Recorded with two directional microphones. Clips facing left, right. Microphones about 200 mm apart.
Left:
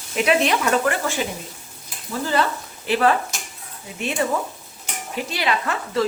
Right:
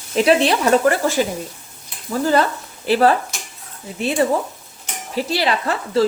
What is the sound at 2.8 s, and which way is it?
Speech, 35° right (ahead or behind).